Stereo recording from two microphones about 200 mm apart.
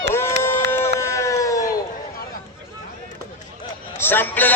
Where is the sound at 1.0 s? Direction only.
15° left (ahead or behind).